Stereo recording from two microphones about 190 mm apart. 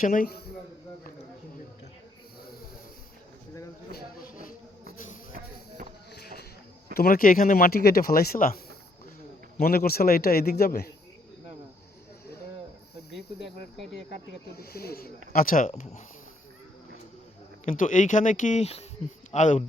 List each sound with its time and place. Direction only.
0.0 s speech: 45° left (ahead or behind)
6.9 s speech: 50° left (ahead or behind)
14.6 s speech: 55° left (ahead or behind); by 16.0 s 35° left (ahead or behind)
17.7 s speech: 45° left (ahead or behind)